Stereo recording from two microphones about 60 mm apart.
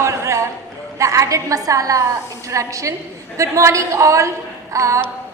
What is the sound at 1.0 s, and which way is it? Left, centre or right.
A woman's voice, right.